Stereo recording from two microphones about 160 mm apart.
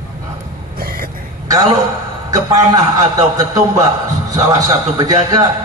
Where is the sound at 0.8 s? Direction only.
65° right (ahead or behind).